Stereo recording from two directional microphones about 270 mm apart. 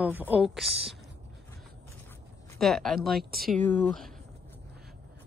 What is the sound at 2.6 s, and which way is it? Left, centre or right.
Speech, centre.